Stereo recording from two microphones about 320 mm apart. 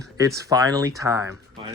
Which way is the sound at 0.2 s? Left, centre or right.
Centre.